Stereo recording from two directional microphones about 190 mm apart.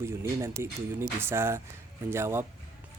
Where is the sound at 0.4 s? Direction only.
15° right (ahead or behind).